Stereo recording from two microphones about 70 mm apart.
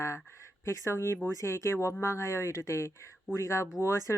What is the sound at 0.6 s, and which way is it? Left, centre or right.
Speech, left.